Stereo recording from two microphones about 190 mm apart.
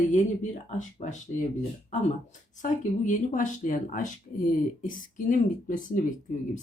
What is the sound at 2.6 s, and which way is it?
Speech, 40° left (ahead or behind).